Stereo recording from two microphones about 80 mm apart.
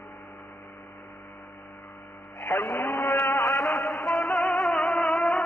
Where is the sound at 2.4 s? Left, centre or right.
Left.